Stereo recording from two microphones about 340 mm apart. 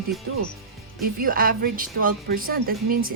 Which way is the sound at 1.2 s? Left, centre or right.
Right.